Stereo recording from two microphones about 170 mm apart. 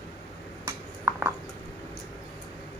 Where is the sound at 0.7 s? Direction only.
15° right (ahead or behind).